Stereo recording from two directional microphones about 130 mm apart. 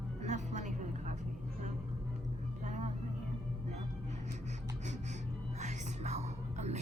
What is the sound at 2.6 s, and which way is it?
Vehicle, 70° right (ahead or behind).